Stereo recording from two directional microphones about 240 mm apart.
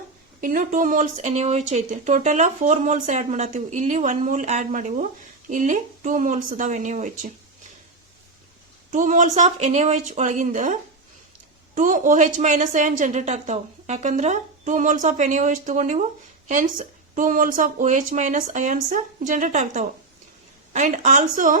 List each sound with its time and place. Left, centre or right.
0.4 s a woman's voice: right
8.9 s a woman's voice: right